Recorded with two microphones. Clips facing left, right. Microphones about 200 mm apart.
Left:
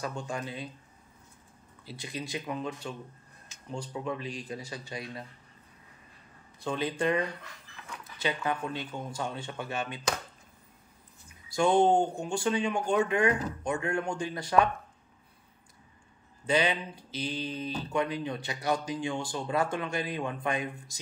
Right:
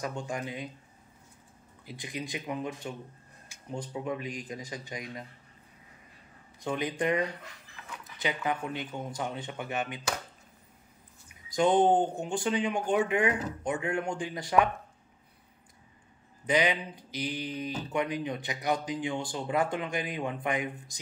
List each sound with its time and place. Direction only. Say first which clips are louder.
0.0 s speech: right 1 dB; 20° right (ahead or behind)
1.9 s speech: even; 15° right (ahead or behind)
6.6 s speech: left 1 dB; 20° right (ahead or behind)
11.5 s speech: even; 20° right (ahead or behind)
16.4 s speech: even; 15° right (ahead or behind)